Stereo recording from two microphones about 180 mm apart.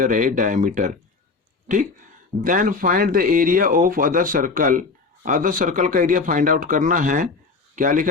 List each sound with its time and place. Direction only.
0.0 s speech: 45° right (ahead or behind)